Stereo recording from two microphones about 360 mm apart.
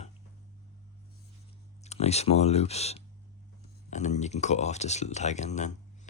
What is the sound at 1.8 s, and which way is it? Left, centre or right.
Speech, centre.